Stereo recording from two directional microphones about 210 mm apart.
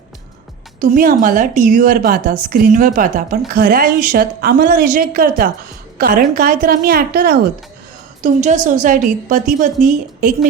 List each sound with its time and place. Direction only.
0.8 s speech: 40° right (ahead or behind)
8.2 s a woman's voice: 35° right (ahead or behind)